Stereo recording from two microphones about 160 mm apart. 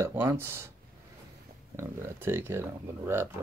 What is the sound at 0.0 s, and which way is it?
Speech, 15° right (ahead or behind).